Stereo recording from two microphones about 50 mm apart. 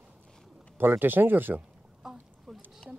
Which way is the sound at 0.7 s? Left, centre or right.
Right.